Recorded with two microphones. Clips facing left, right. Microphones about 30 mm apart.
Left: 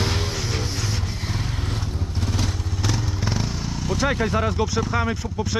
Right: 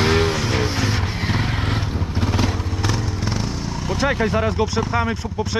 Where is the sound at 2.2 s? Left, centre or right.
Right.